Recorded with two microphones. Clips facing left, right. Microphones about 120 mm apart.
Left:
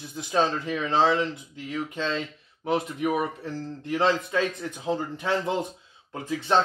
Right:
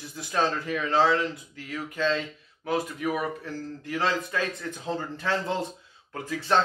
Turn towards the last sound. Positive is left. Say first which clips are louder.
# left 1 dB
turn(degrees=20)  # may be behind; listen again after turning